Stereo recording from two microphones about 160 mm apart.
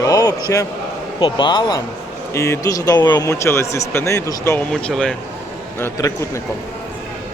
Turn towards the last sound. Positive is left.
turn(degrees=20)  # may be behind; listen again after turning